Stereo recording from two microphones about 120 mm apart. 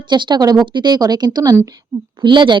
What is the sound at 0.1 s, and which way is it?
Speech, 40° right (ahead or behind).